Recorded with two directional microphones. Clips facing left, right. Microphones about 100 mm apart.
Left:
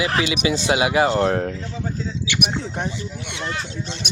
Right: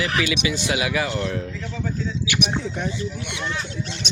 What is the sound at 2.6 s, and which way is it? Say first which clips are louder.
Speech: even; 35° left (ahead or behind).